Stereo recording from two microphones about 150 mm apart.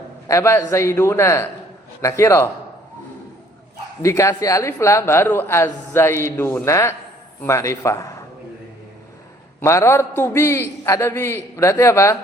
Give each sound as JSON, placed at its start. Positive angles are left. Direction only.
{"t": 0.3, "sound": "a man's voice", "side_deg": 20}
{"t": 4.0, "sound": "a man's voice", "side_deg": 20}
{"t": 9.6, "sound": "speech", "side_deg": 20}